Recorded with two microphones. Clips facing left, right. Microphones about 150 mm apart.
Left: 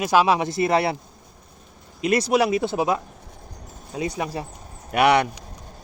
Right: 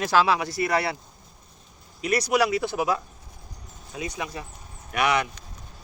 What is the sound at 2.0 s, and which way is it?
Speech, 25° left (ahead or behind).